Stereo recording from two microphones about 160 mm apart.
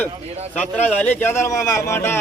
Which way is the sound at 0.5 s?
10° left (ahead or behind).